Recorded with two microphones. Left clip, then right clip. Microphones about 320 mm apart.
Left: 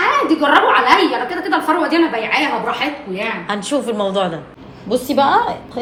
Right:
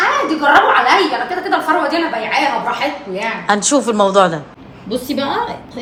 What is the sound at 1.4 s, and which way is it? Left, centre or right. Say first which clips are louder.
Speech: right 1 dB; centre.